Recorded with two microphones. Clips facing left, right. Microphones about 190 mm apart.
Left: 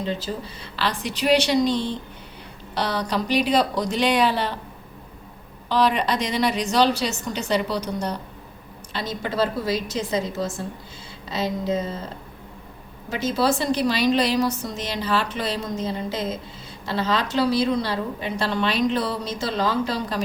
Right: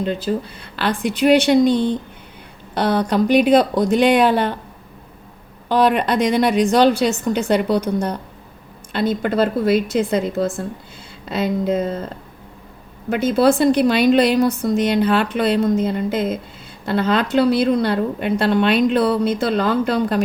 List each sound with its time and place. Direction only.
0.0 s a woman's voice: 55° right (ahead or behind)
5.6 s a woman's voice: 50° right (ahead or behind)
13.1 s a woman's voice: 55° right (ahead or behind)